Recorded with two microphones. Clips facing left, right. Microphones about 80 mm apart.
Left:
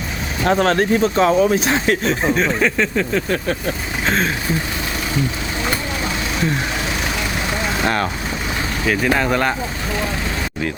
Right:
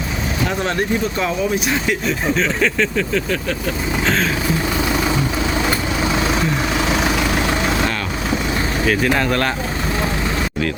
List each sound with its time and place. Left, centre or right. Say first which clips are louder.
0.4 s speech: left 7 dB; left
1.2 s speech: left 5 dB; left
2.3 s speech: left 1 dB; centre
8.9 s speech: left 1 dB; centre